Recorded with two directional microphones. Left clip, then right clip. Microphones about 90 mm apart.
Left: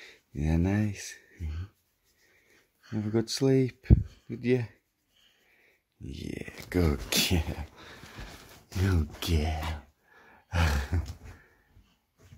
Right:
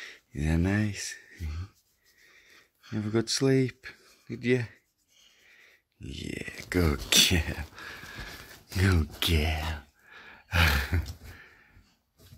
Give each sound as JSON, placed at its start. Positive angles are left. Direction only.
{"t": 0.0, "sound": "speech", "side_deg": 5}
{"t": 2.5, "sound": "speech", "side_deg": 0}
{"t": 8.6, "sound": "speech", "side_deg": -20}
{"t": 9.8, "sound": "a sound", "side_deg": -20}